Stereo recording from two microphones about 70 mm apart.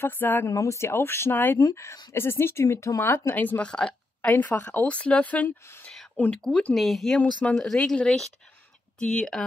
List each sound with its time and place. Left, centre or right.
0.0 s speech: left
0.5 s speech: left
1.6 s speech: left
2.1 s speech: left
3.0 s speech: left
3.6 s speech: centre
4.3 s speech: left; by 9.4 s centre